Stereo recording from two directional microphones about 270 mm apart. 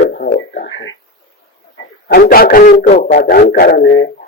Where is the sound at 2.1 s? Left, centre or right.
Left.